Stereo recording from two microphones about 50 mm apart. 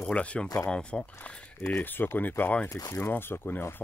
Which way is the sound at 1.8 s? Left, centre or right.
Left.